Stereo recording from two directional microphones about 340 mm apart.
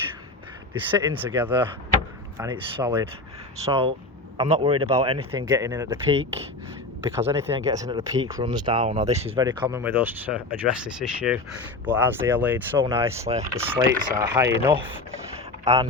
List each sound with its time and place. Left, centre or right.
0.7 s speech: centre